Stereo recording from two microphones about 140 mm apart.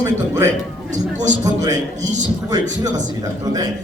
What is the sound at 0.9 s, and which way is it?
Speech, 60° right (ahead or behind).